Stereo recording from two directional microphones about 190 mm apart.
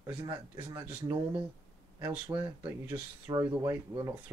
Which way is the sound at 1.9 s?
10° right (ahead or behind).